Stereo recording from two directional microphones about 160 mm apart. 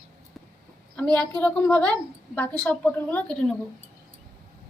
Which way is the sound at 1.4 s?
10° left (ahead or behind).